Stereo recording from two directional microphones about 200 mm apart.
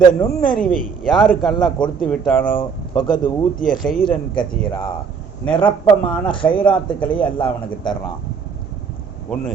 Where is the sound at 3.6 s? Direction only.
40° left (ahead or behind).